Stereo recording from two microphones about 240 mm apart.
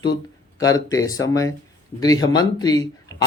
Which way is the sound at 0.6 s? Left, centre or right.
Centre.